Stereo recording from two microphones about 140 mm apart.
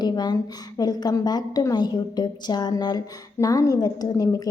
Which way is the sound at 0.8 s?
30° left (ahead or behind).